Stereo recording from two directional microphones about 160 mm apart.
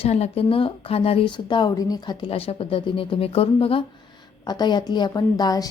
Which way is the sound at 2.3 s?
35° left (ahead or behind).